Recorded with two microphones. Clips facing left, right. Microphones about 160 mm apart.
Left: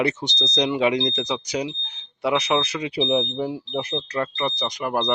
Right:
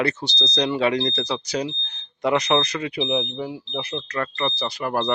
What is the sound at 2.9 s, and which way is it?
Speech, 30° left (ahead or behind).